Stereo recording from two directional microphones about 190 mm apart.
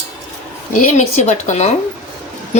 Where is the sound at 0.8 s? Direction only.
40° left (ahead or behind).